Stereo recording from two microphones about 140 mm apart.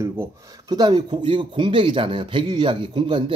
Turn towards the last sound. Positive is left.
turn(degrees=-35)  # may be behind; listen again after turning